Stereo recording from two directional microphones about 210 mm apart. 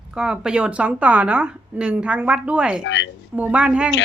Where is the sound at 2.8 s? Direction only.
60° left (ahead or behind).